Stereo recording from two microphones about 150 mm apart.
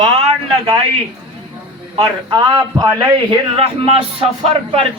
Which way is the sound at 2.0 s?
30° right (ahead or behind).